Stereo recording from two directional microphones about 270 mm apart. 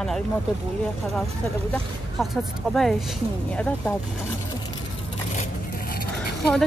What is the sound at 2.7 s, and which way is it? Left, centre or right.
Speech, centre.